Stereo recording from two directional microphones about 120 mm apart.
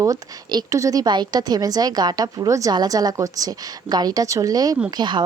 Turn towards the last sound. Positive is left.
turn(degrees=-40)  # may be behind; listen again after turning